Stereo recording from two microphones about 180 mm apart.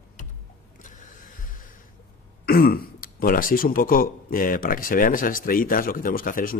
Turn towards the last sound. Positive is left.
turn(degrees=50)  # may be behind; listen again after turning